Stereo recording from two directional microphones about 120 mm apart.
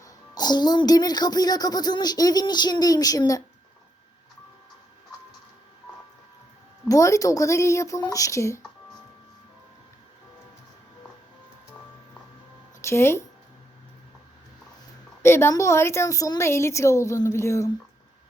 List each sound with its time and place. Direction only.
0.0 s speech: 35° left (ahead or behind)
6.8 s a woman's voice: 25° left (ahead or behind)
12.8 s speech: 20° left (ahead or behind)
15.2 s a woman's voice: 20° left (ahead or behind)